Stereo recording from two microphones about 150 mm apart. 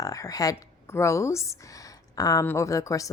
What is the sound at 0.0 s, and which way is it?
A woman's voice, 25° left (ahead or behind).